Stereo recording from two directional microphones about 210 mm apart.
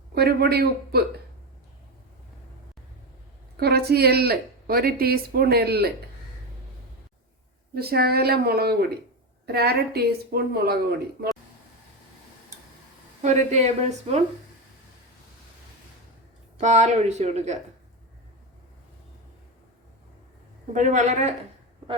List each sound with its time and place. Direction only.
0.1 s a woman's voice: 45° right (ahead or behind)
3.6 s a woman's voice: 50° right (ahead or behind)
7.7 s a woman's voice: 45° right (ahead or behind)
13.2 s speech: 35° right (ahead or behind)
16.6 s speech: 35° right (ahead or behind)
20.7 s speech: 35° right (ahead or behind)